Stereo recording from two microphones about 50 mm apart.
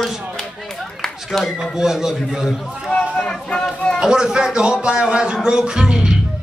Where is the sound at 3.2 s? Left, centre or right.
Centre.